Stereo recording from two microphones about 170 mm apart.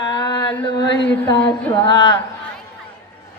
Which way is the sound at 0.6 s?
25° left (ahead or behind).